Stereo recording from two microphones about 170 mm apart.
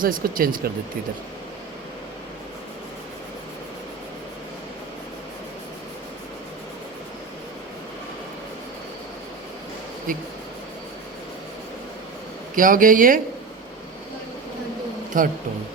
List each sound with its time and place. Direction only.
0.0 s speech: 55° right (ahead or behind)
12.5 s speech: 50° right (ahead or behind)
15.1 s speech: 50° right (ahead or behind)